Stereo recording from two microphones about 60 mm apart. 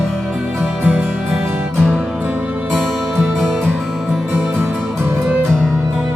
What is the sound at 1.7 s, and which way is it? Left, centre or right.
Music, centre.